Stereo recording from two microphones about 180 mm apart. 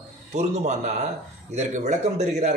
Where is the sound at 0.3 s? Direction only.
40° right (ahead or behind).